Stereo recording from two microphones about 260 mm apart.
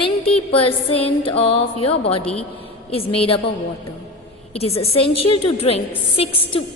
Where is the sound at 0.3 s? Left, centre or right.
Left.